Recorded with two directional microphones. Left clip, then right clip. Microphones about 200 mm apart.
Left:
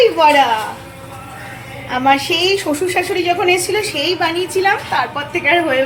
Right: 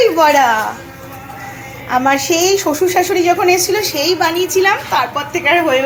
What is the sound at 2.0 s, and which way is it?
A woman's voice, 10° right (ahead or behind).